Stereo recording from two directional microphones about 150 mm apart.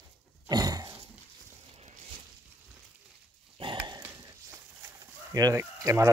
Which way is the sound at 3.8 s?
20° right (ahead or behind).